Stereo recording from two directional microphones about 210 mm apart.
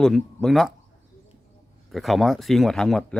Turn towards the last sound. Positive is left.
turn(degrees=0)  # may be behind; listen again after turning